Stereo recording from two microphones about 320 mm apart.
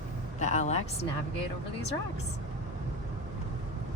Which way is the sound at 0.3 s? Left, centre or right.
Left.